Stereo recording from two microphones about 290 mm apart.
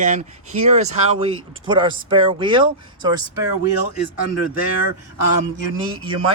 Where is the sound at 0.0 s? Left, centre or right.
Right.